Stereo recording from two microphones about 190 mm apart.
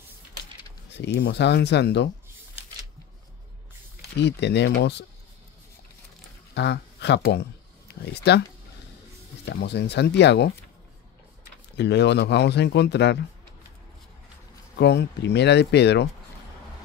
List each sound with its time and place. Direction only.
0.9 s speech: 65° left (ahead or behind)
4.2 s speech: 65° left (ahead or behind)
6.5 s speech: 65° left (ahead or behind)
9.5 s speech: 65° left (ahead or behind)
11.7 s speech: 65° left (ahead or behind)
14.8 s speech: 65° left (ahead or behind)